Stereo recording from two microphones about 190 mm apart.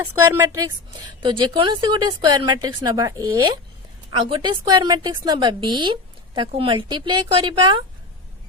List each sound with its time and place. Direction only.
0.1 s a woman's voice: 10° right (ahead or behind)
1.2 s speech: 25° right (ahead or behind)